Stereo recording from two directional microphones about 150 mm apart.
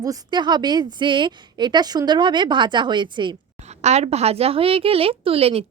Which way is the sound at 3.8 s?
50° right (ahead or behind).